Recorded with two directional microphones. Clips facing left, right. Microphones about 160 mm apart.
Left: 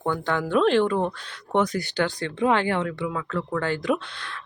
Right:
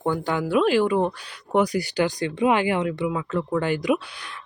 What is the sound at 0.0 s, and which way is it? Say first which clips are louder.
Speech: right 1 dB; 10° right (ahead or behind).